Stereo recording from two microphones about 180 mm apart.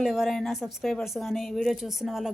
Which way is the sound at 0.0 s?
Centre (ahead or behind).